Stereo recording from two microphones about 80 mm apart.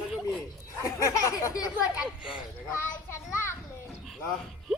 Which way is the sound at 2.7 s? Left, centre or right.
Left.